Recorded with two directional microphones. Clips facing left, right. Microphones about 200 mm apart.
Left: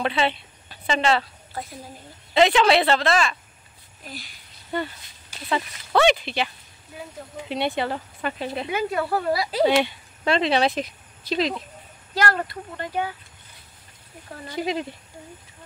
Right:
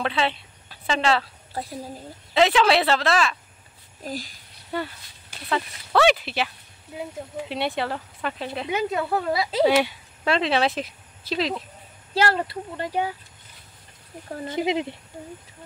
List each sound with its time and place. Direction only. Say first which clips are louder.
0.0 s speech: left 1 dB; centre (ahead or behind)
1.5 s a woman's voice: right 3 dB; 30° right (ahead or behind)
2.3 s speech: left 1 dB; centre (ahead or behind)
4.0 s speech: right 8 dB; 40° right (ahead or behind)
4.7 s speech: left 1 dB; 5° right (ahead or behind)
8.6 s a woman's voice: right 1 dB; 20° right (ahead or behind)
9.6 s speech: right 1 dB; 5° right (ahead or behind)
12.1 s speech: right 2 dB; 30° right (ahead or behind)
14.4 s a woman's voice: right 2 dB; 20° right (ahead or behind)